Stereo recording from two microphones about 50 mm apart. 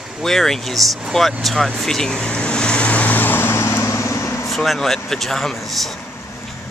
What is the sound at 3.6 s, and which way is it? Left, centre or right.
Vehicle, left.